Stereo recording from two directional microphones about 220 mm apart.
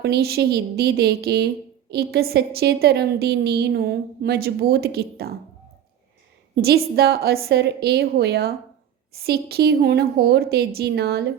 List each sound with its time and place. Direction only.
0.0 s a woman's voice: 45° right (ahead or behind)
6.6 s a woman's voice: 45° right (ahead or behind)